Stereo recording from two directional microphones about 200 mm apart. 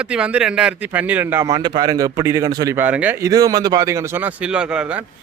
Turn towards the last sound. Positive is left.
turn(degrees=-5)  # may be behind; listen again after turning